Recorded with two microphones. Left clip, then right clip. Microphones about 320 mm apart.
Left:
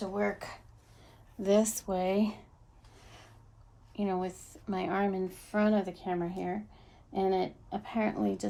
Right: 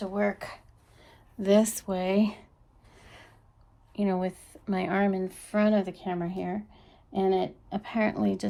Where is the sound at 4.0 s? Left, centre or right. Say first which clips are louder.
Right 4 dB; right.